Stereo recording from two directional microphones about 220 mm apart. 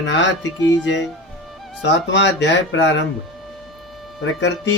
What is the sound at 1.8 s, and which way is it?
Speech, 55° left (ahead or behind).